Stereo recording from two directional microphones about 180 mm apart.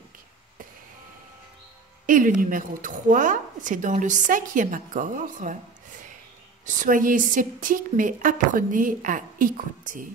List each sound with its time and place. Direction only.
2.0 s a woman's voice: 50° right (ahead or behind)